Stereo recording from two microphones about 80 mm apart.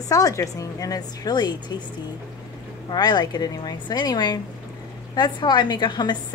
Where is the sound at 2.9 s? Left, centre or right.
Left.